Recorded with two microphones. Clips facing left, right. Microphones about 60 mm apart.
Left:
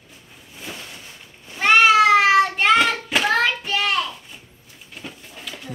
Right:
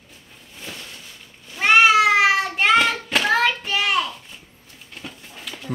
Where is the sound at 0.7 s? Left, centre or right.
Centre.